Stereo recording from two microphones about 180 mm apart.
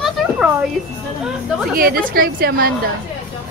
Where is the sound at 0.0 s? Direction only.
10° right (ahead or behind).